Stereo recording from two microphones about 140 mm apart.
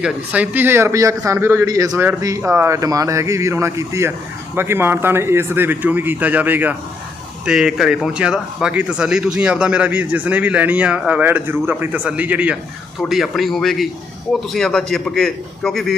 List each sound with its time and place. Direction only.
0.0 s a man's voice: 10° right (ahead or behind)